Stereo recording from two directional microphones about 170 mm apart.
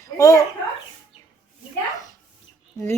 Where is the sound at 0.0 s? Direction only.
20° left (ahead or behind).